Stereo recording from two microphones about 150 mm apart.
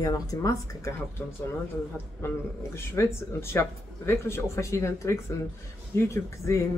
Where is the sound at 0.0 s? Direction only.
25° left (ahead or behind).